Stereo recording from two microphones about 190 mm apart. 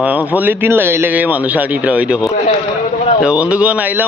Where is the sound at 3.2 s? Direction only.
5° right (ahead or behind).